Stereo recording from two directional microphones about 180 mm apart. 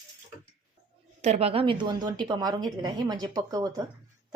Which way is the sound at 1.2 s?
35° right (ahead or behind).